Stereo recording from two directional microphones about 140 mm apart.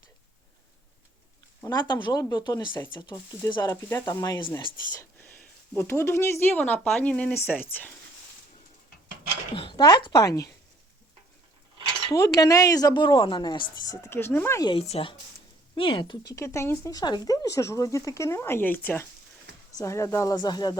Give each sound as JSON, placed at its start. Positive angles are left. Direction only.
{"t": 1.6, "sound": "a woman's voice", "side_deg": 30}
{"t": 4.5, "sound": "speech", "side_deg": 20}
{"t": 9.7, "sound": "a woman's voice", "side_deg": 30}
{"t": 12.2, "sound": "a woman's voice", "side_deg": 25}
{"t": 14.6, "sound": "a woman's voice", "side_deg": 40}
{"t": 17.0, "sound": "a woman's voice", "side_deg": 30}